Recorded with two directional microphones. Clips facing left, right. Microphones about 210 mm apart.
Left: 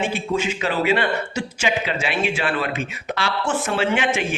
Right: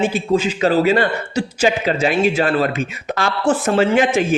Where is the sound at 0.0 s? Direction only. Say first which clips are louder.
Right 6 dB; 35° right (ahead or behind).